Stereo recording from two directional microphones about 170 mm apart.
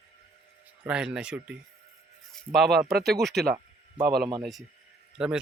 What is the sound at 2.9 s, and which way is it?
Speech, 65° right (ahead or behind).